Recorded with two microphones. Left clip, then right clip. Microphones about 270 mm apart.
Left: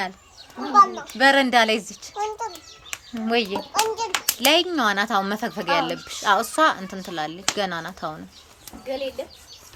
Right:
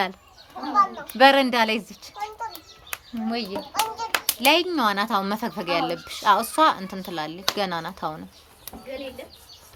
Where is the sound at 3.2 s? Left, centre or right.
Centre.